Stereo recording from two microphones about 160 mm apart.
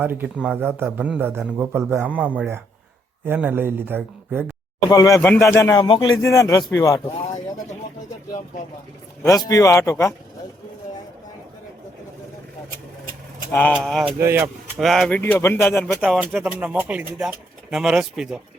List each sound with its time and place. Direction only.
0.0 s a man's voice: 10° right (ahead or behind)
4.9 s speech: 20° left (ahead or behind)
5.8 s speech: 30° left (ahead or behind)
9.2 s speech: 20° left (ahead or behind)
13.5 s speech: 10° left (ahead or behind)
14.2 s a man's voice: 15° right (ahead or behind)
14.8 s speech: centre (ahead or behind)
15.2 s speech: 15° left (ahead or behind); by 18.3 s centre (ahead or behind)